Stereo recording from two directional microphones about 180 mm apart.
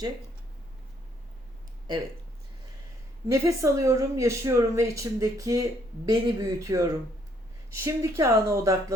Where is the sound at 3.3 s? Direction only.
15° right (ahead or behind).